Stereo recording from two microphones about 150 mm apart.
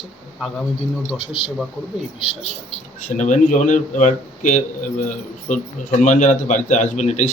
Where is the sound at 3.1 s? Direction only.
55° left (ahead or behind).